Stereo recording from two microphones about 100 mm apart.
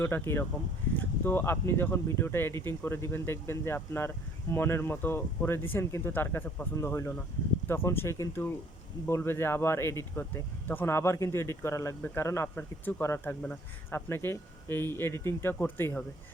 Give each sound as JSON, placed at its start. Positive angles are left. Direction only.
{"t": 0.0, "sound": "speech", "side_deg": 25}